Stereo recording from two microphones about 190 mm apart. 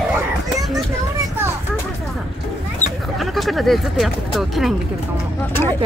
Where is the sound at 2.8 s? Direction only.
40° left (ahead or behind).